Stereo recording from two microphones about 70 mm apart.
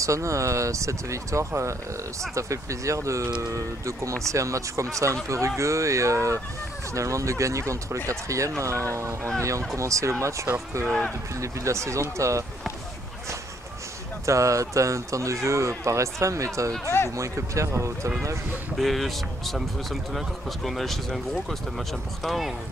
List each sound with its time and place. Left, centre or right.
0.0 s speech: right
10.9 s speech: centre
11.3 s speech: right
14.2 s speech: right
16.8 s speech: left
17.1 s speech: right
18.8 s speech: centre